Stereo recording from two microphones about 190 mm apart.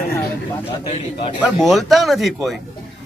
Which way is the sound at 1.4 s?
Centre (ahead or behind).